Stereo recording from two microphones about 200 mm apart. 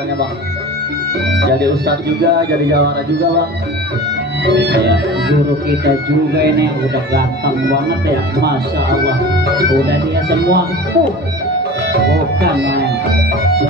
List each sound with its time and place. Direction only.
1.3 s speech: 55° right (ahead or behind)
4.5 s speech: 55° right (ahead or behind)
9.8 s speech: 55° right (ahead or behind)